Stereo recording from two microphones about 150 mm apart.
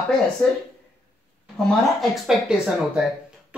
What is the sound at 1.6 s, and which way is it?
Speech, 5° left (ahead or behind).